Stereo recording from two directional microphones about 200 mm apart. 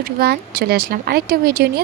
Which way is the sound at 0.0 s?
50° right (ahead or behind).